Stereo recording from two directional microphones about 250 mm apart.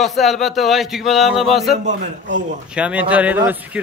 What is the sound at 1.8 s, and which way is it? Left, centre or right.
Speech, right.